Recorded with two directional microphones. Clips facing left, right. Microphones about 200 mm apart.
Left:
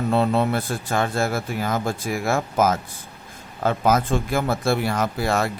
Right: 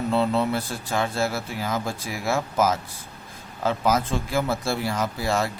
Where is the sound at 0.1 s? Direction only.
55° left (ahead or behind).